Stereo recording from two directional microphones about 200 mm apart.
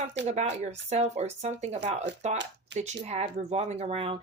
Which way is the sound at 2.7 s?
60° right (ahead or behind).